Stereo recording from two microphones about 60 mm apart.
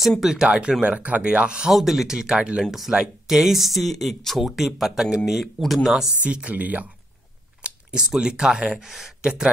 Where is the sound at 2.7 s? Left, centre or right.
Centre.